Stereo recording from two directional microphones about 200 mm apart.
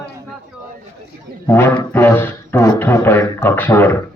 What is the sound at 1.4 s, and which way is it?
Speech, 10° left (ahead or behind).